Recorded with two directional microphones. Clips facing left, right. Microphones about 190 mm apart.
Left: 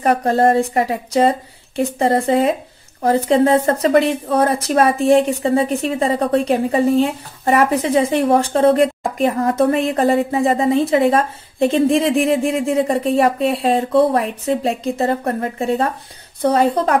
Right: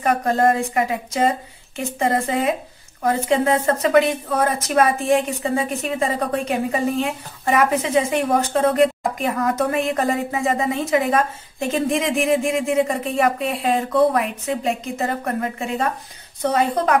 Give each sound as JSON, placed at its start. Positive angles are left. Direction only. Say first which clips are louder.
{"t": 0.0, "sound": "a woman's voice", "louder": "left 3 dB", "side_deg": 35}